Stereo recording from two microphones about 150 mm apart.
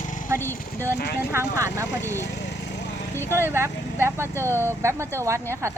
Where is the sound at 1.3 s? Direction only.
15° right (ahead or behind).